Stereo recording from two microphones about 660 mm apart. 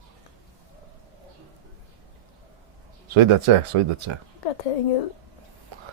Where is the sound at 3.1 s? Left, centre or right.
Right.